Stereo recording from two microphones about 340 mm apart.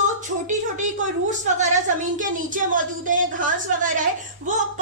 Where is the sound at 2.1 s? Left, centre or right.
Right.